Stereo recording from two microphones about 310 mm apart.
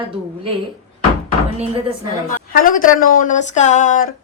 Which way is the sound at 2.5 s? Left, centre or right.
Left.